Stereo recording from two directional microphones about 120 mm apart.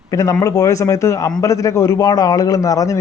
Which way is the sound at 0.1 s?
30° left (ahead or behind).